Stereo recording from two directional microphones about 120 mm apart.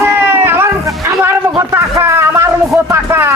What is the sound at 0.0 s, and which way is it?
Music, 15° right (ahead or behind).